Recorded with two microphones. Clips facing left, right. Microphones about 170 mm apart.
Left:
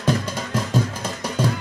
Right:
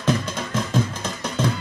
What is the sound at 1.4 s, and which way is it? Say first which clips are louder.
Music: left 1 dB; 10° left (ahead or behind).